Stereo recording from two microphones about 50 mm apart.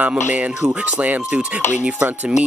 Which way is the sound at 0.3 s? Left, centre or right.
Right.